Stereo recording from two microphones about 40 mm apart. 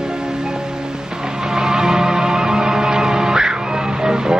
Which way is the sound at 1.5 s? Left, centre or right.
Centre.